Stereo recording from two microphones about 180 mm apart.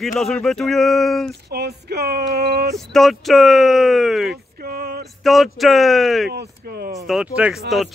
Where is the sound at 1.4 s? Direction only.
60° right (ahead or behind).